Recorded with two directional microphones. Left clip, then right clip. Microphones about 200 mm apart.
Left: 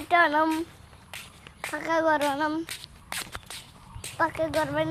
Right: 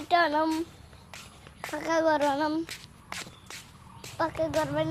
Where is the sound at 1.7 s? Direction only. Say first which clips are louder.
Left 1 dB; centre (ahead or behind).